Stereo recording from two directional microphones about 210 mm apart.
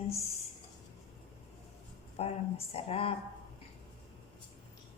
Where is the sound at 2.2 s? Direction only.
30° left (ahead or behind).